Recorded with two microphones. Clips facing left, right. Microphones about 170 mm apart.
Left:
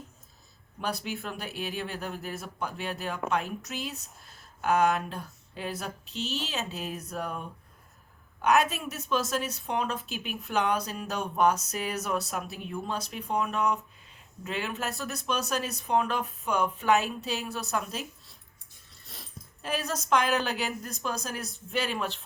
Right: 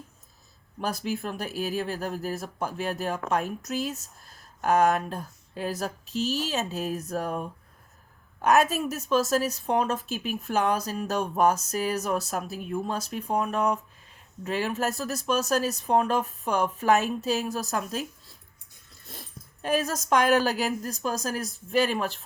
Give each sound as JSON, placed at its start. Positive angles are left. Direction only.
{"t": 0.8, "sound": "speech", "side_deg": -40}
{"t": 12.1, "sound": "speech", "side_deg": 0}
{"t": 12.4, "sound": "speech", "side_deg": -40}
{"t": 19.6, "sound": "speech", "side_deg": -45}